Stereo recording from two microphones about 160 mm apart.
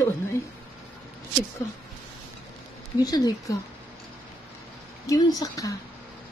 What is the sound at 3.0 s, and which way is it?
Speech, 25° left (ahead or behind).